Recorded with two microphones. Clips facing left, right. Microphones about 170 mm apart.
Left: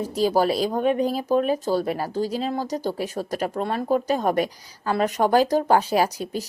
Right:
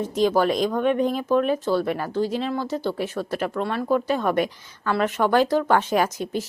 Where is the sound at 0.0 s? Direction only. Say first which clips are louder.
Right 1 dB; 35° left (ahead or behind).